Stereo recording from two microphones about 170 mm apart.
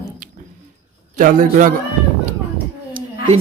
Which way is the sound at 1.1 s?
50° right (ahead or behind).